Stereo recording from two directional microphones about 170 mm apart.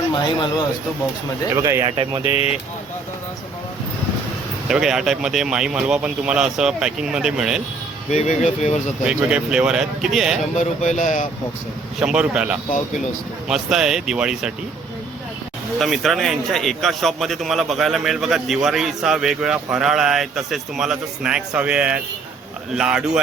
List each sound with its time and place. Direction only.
1.5 s speech: 15° right (ahead or behind)
2.2 s speech: 35° left (ahead or behind)
4.7 s a man's voice: centre (ahead or behind)
8.1 s speech: 40° left (ahead or behind)
9.0 s a man's voice: 5° right (ahead or behind)
10.5 s speech: 45° left (ahead or behind)
11.9 s a man's voice: 5° right (ahead or behind)
15.8 s a man's voice: centre (ahead or behind)